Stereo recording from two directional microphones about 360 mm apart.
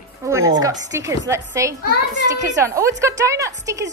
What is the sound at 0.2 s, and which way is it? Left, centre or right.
A woman's voice, centre.